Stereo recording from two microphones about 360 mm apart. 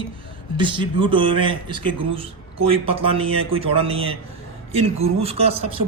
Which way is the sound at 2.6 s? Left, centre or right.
Centre.